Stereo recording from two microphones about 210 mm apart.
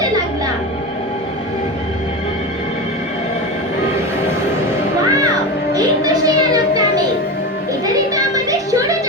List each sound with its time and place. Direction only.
5.7 s music: 20° right (ahead or behind)
8.1 s music: 15° right (ahead or behind)